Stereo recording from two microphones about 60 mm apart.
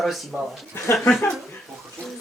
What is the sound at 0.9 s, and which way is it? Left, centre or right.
Speech, left.